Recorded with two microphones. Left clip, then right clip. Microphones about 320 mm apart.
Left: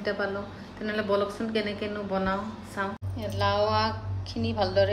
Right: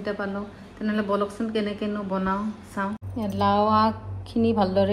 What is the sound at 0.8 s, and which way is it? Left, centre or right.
Speech, centre.